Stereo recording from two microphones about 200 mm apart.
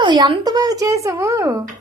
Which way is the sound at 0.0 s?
25° right (ahead or behind).